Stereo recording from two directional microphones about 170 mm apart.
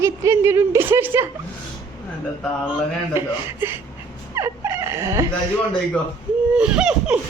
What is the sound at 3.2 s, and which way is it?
Speech, 15° right (ahead or behind).